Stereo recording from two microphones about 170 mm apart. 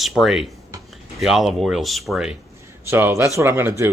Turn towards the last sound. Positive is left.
turn(degrees=-15)  # may be behind; listen again after turning